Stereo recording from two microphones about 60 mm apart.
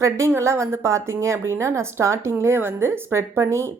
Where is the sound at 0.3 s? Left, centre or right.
Right.